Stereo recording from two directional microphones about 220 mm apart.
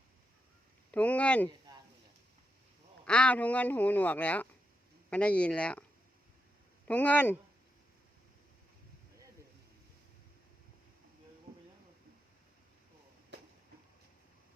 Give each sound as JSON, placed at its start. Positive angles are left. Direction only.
{"t": 0.9, "sound": "speech", "side_deg": 5}
{"t": 1.7, "sound": "a sound", "side_deg": -20}
{"t": 3.1, "sound": "speech", "side_deg": 5}
{"t": 6.8, "sound": "speech", "side_deg": 5}